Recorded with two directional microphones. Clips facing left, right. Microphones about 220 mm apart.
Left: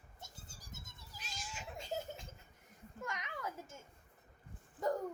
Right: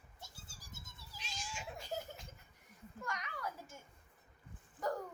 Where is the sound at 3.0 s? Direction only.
20° left (ahead or behind).